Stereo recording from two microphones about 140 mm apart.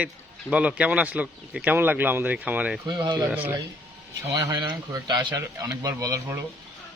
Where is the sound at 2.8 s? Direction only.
30° right (ahead or behind).